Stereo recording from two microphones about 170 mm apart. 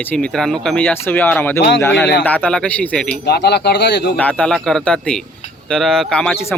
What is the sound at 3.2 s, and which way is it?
Speech, 75° left (ahead or behind).